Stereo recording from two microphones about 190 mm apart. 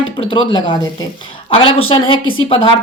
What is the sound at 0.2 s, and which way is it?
Speech, 25° left (ahead or behind).